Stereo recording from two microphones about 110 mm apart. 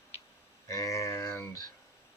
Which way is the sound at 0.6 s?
30° left (ahead or behind).